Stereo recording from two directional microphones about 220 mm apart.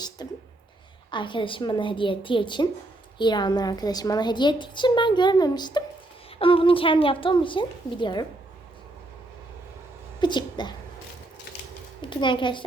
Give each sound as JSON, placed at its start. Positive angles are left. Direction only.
{"t": 0.2, "sound": "a woman's voice", "side_deg": 20}
{"t": 10.2, "sound": "speech", "side_deg": 20}
{"t": 12.0, "sound": "a woman's voice", "side_deg": 20}